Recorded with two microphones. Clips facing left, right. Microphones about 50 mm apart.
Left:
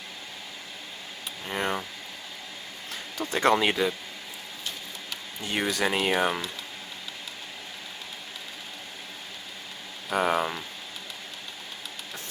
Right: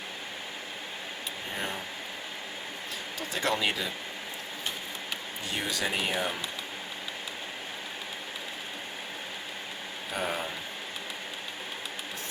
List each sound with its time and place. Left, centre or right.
1.5 s a sound: left
3.2 s speech: left
5.5 s speech: left
10.1 s speech: left